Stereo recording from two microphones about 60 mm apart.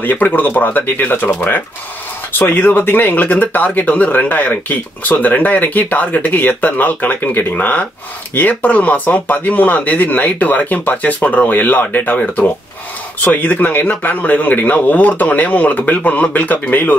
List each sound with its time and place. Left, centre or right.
0.0 s speech: left